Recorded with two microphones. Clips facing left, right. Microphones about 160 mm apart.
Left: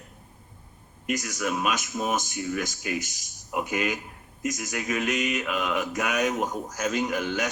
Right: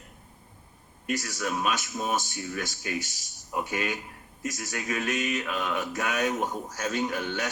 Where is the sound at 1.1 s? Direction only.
30° right (ahead or behind).